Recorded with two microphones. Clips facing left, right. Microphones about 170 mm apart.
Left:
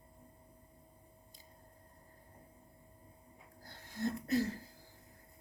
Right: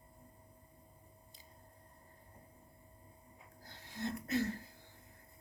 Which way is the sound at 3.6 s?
45° left (ahead or behind).